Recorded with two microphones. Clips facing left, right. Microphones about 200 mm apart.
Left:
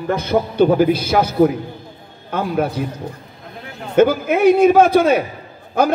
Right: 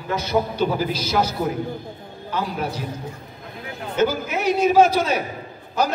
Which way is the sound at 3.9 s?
55° left (ahead or behind).